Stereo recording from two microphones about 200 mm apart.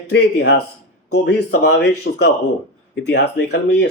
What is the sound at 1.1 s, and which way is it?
Speech, 75° left (ahead or behind).